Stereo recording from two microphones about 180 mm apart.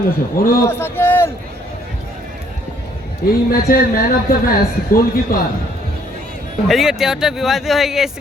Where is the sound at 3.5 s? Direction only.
55° left (ahead or behind).